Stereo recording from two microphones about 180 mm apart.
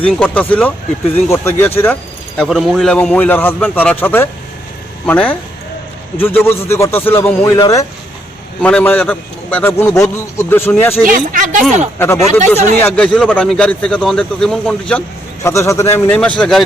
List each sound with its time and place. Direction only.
0.0 s speech: 5° left (ahead or behind)
11.0 s speech: 50° right (ahead or behind)
11.9 s speech: 15° left (ahead or behind)
15.4 s speech: 15° left (ahead or behind)